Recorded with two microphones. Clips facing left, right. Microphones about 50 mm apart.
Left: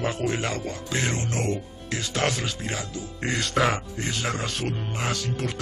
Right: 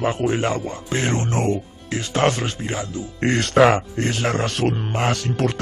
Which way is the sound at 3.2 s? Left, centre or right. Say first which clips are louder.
Right 8 dB; right.